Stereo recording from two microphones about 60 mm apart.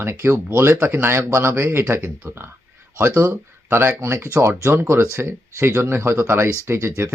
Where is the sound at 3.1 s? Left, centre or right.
Right.